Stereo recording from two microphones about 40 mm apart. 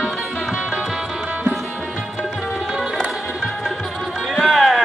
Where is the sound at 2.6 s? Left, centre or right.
Centre.